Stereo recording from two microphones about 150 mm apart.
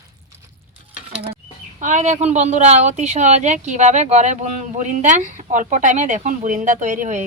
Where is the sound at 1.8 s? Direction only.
55° right (ahead or behind).